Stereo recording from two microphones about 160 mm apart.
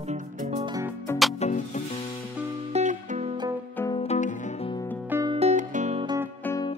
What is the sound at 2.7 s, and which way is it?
Music, 45° right (ahead or behind).